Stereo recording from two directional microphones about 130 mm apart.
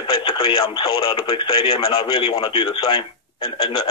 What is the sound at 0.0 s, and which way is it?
Speech, 40° left (ahead or behind).